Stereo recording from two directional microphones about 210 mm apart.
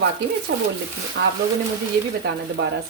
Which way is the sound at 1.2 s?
55° right (ahead or behind).